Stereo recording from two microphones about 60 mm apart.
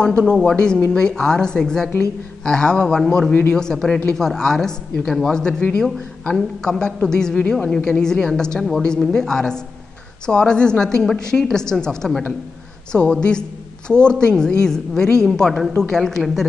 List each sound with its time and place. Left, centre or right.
0.0 s a woman's voice: centre